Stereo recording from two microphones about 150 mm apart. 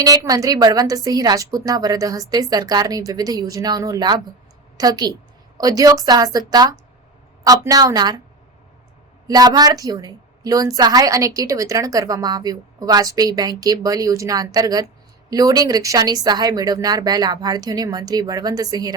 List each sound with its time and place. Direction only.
0.0 s a woman's voice: 25° right (ahead or behind)
9.2 s a woman's voice: 25° right (ahead or behind)